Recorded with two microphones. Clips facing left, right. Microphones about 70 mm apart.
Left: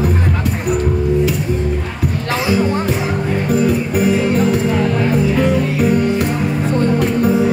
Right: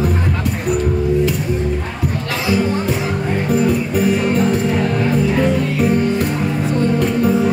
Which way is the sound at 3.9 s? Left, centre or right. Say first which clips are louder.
Left 1 dB; left.